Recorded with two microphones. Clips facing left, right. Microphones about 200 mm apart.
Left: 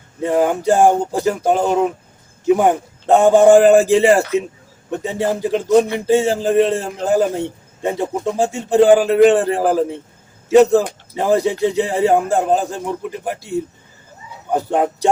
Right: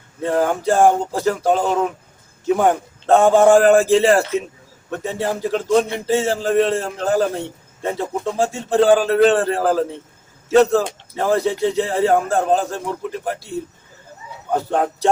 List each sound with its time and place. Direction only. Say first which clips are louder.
0.2 s speech: left 2 dB; 15° left (ahead or behind)